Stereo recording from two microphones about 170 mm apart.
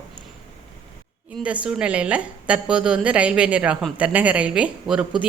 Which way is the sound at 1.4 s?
5° right (ahead or behind).